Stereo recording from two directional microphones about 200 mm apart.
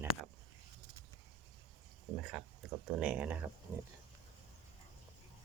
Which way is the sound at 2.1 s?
Centre (ahead or behind).